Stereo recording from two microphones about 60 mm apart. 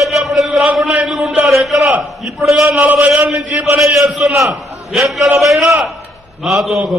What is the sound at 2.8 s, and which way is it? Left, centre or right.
Speech, right.